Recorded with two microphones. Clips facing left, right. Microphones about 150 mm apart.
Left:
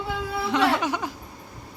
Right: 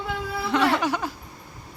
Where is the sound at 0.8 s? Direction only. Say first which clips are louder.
Right 1 dB; 15° left (ahead or behind).